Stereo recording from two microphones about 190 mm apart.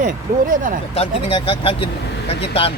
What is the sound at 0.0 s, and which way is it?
Speech, 45° right (ahead or behind).